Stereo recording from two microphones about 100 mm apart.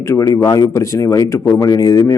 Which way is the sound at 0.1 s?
35° left (ahead or behind).